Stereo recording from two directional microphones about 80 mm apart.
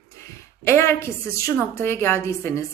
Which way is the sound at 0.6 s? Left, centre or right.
Left.